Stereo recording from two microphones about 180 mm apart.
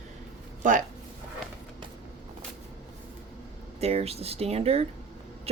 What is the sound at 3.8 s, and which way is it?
A woman's voice, 35° right (ahead or behind).